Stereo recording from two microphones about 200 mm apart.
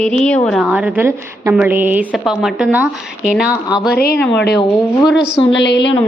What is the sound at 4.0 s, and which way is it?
Speech, 50° left (ahead or behind).